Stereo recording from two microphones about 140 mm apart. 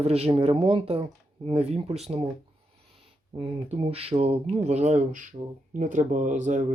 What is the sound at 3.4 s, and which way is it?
Speech, 45° right (ahead or behind).